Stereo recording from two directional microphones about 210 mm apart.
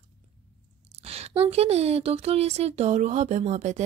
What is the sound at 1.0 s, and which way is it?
A woman's voice, 30° right (ahead or behind).